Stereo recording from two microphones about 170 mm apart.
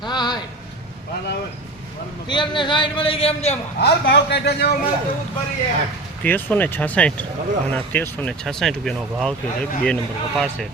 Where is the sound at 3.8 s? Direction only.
80° left.